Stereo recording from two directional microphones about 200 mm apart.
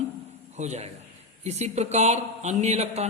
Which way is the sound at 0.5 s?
35° right (ahead or behind).